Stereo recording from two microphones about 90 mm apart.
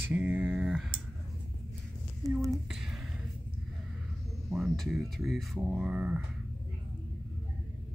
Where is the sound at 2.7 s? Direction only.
5° right (ahead or behind).